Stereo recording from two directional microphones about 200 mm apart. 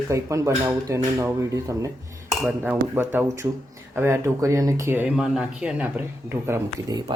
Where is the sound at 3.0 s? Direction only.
10° right (ahead or behind).